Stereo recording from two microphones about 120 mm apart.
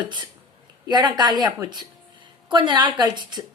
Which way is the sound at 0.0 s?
40° right (ahead or behind).